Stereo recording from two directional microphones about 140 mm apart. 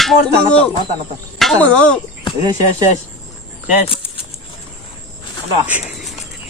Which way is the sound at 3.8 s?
40° left (ahead or behind).